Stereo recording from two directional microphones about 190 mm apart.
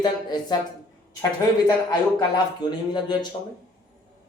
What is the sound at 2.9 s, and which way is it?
Speech, 25° left (ahead or behind).